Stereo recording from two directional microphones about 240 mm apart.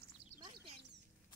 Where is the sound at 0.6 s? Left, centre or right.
Right.